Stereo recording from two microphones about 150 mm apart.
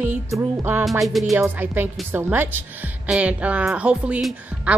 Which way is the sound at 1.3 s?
10° right (ahead or behind).